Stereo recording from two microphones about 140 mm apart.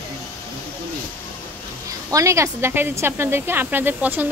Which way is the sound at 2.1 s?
25° right (ahead or behind).